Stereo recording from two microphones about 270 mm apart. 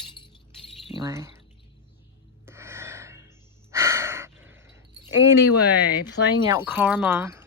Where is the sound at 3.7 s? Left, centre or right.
Centre.